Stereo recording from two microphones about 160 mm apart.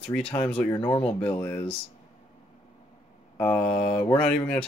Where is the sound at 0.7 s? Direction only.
35° left (ahead or behind).